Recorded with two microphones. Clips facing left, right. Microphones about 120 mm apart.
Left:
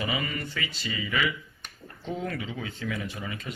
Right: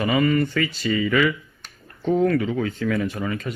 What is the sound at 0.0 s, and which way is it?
Speech, 55° right (ahead or behind).